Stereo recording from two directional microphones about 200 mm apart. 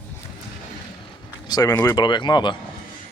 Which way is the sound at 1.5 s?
15° left (ahead or behind).